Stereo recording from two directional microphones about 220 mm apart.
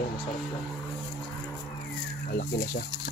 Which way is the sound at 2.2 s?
45° left (ahead or behind).